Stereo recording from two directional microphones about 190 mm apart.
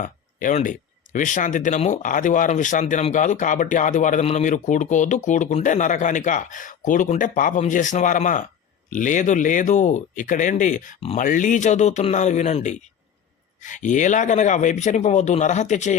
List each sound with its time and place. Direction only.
0.0 s speech: 45° left (ahead or behind)